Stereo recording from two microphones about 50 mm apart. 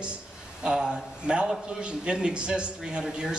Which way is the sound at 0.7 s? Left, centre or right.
Centre.